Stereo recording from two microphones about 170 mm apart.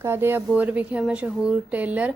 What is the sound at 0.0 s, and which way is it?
A woman's voice, 15° right (ahead or behind).